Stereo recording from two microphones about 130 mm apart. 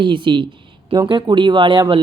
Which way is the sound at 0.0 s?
40° right (ahead or behind).